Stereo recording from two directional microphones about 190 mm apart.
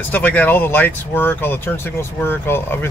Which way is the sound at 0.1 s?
10° left (ahead or behind).